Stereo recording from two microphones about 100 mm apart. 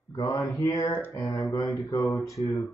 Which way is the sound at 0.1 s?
40° left (ahead or behind).